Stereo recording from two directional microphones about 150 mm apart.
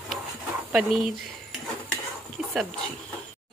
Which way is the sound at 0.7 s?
5° right (ahead or behind).